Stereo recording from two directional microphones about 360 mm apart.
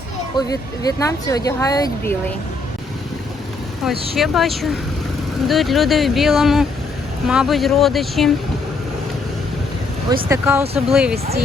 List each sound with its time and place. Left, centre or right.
0.3 s speech: centre
4.1 s speech: centre
10.2 s speech: centre
11.1 s speech: right